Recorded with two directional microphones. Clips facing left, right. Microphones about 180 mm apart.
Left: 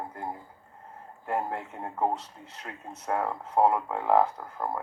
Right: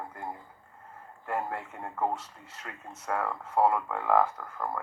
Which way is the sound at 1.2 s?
20° left (ahead or behind).